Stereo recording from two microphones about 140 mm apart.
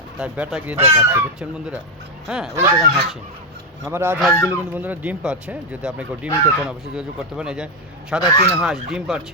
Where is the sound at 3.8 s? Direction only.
15° right (ahead or behind).